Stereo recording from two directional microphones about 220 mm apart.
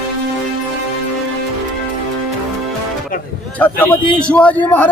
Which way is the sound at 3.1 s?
40° left (ahead or behind).